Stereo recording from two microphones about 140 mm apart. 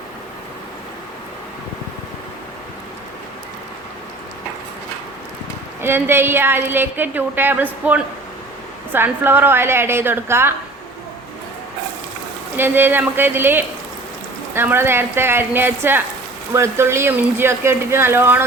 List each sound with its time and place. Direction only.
5.8 s a woman's voice: 15° right (ahead or behind)
12.5 s a woman's voice: 15° right (ahead or behind)